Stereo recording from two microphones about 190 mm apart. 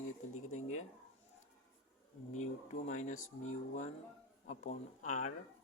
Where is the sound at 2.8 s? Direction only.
40° left (ahead or behind).